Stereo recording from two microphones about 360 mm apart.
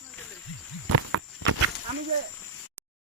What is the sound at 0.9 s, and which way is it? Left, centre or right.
Walk, right.